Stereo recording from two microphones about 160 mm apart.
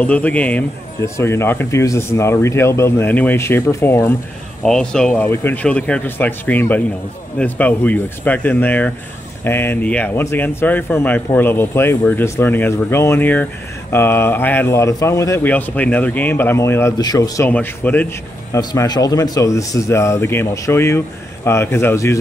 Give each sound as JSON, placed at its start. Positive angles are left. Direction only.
{"t": 0.0, "sound": "a man's voice", "side_deg": 10}
{"t": 4.6, "sound": "a man's voice", "side_deg": 5}
{"t": 17.5, "sound": "a man's voice", "side_deg": 10}
{"t": 18.5, "sound": "a man's voice", "side_deg": 20}